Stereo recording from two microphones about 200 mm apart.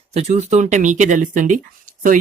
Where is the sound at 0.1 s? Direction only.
30° right (ahead or behind).